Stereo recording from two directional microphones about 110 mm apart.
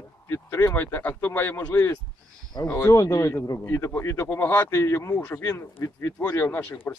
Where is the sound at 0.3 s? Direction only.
25° left (ahead or behind).